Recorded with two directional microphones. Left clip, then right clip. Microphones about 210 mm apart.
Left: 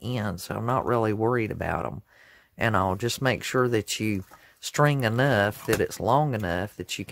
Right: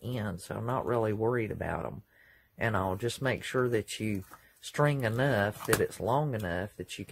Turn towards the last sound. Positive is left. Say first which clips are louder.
# left 6 dB
turn(degrees=40)  # may be behind; listen again after turning